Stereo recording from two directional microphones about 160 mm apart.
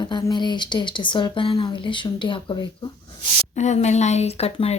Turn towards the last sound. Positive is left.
turn(degrees=40)  # may be behind; listen again after turning